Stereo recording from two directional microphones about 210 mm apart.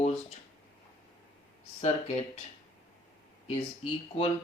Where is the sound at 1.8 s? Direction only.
30° left (ahead or behind).